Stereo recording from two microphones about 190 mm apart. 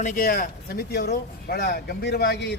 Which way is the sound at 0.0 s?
45° left (ahead or behind).